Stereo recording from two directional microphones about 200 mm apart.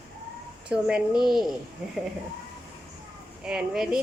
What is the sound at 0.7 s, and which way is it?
Speech, 5° right (ahead or behind).